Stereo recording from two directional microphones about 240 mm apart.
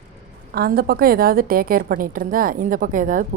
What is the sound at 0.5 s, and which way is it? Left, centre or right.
A woman's voice, right.